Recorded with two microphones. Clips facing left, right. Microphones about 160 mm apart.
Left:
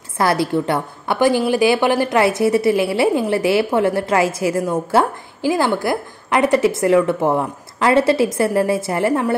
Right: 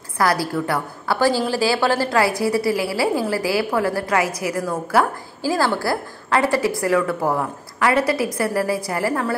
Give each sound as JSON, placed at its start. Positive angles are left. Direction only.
{"t": 0.2, "sound": "a woman's voice", "side_deg": 25}